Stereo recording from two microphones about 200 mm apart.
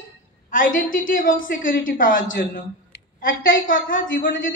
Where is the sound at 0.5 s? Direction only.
40° left (ahead or behind).